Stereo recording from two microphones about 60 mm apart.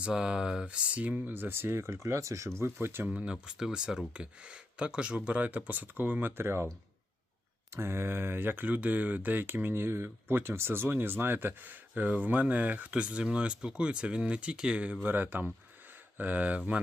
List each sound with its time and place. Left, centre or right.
0.0 s speech: centre; by 3.1 s right
3.1 s speech: right
7.7 s speech: right; by 14.9 s centre
15.0 s speech: right